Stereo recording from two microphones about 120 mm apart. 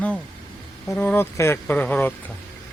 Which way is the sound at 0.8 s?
15° left (ahead or behind).